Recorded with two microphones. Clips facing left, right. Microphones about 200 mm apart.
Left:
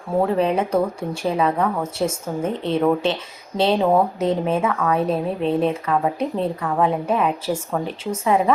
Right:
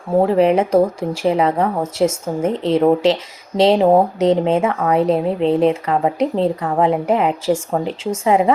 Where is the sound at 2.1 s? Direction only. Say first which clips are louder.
Right 5 dB; 90° right.